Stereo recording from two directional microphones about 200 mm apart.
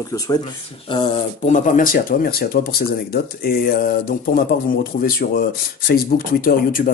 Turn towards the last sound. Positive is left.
turn(degrees=45)  # may be behind; listen again after turning